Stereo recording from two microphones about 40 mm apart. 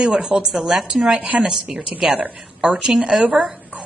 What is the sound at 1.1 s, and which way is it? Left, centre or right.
Speech, right.